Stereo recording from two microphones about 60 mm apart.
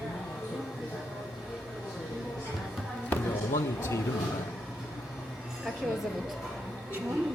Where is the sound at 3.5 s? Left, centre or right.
Left.